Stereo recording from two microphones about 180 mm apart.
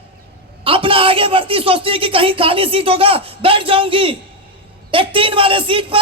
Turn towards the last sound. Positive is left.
turn(degrees=-30)  # may be behind; listen again after turning